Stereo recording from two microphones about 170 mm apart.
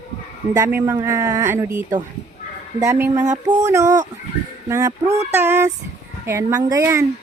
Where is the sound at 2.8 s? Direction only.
15° right (ahead or behind).